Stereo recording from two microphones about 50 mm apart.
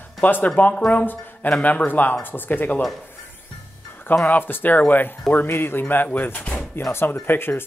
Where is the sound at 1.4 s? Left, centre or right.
Left.